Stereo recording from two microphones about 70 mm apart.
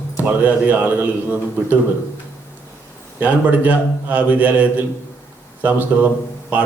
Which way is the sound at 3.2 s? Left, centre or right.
Right.